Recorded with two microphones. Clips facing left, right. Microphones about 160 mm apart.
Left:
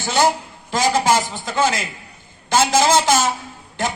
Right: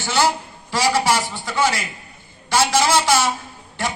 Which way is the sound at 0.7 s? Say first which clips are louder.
Left 2 dB; 45° left (ahead or behind).